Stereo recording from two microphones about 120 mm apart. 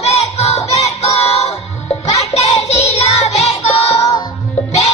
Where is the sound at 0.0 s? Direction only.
60° left (ahead or behind).